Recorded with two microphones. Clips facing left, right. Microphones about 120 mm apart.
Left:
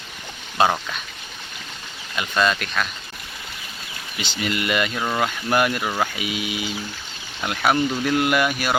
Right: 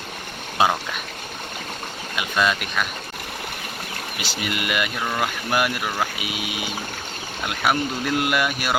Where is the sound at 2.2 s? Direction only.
10° right (ahead or behind).